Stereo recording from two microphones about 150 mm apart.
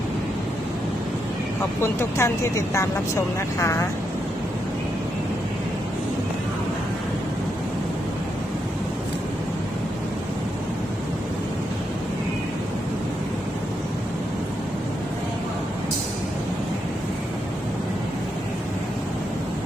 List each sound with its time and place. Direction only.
1.8 s speech: 15° left (ahead or behind)